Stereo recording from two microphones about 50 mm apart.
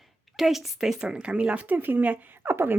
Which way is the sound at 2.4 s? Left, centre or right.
Right.